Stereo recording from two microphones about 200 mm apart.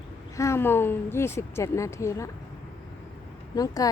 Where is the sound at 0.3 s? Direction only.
15° left (ahead or behind).